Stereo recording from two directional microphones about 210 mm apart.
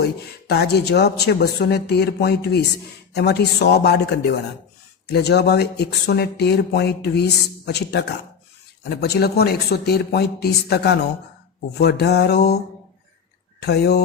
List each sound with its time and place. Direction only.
0.0 s speech: 50° left (ahead or behind)
13.6 s speech: 50° left (ahead or behind)